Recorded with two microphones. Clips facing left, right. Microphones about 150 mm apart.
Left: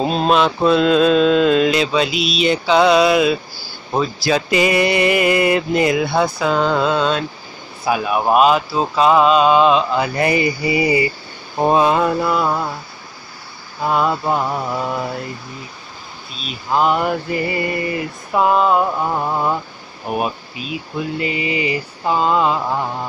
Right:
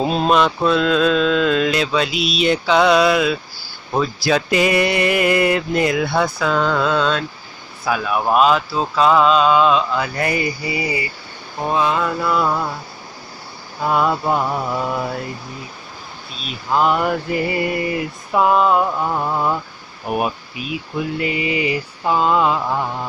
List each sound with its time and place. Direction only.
0.0 s mantra: 5° right (ahead or behind)
6.8 s speech: 5° left (ahead or behind)
11.6 s mantra: 30° left (ahead or behind); by 12.7 s 10° left (ahead or behind)
13.8 s mantra: centre (ahead or behind)
16.7 s mantra: 5° left (ahead or behind)
20.1 s speech: 5° right (ahead or behind)
21.2 s mantra: 5° right (ahead or behind)
22.7 s speech: 10° left (ahead or behind)